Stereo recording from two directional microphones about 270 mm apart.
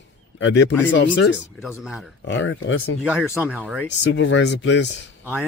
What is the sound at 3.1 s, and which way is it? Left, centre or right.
Speech, centre.